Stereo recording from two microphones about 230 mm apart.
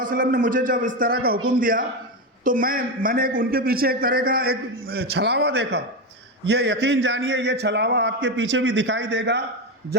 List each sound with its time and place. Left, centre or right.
0.0 s a man's voice: right